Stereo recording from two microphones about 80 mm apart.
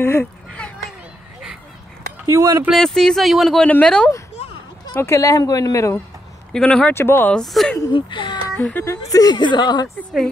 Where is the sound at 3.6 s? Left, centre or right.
Centre.